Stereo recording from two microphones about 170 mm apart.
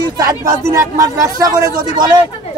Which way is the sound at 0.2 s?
20° right (ahead or behind).